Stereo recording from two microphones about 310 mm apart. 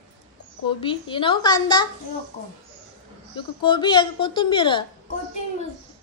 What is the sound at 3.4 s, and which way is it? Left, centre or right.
A woman's voice, centre.